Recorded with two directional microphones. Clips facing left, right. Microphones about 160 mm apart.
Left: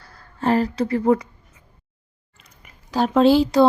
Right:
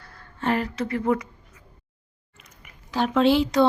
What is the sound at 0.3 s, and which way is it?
Speech, 35° left (ahead or behind).